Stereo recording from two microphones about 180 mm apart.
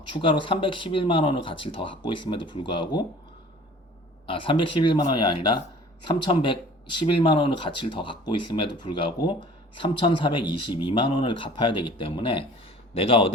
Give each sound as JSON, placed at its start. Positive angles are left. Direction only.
{"t": 0.1, "sound": "speech", "side_deg": 25}
{"t": 4.3, "sound": "a man's voice", "side_deg": 30}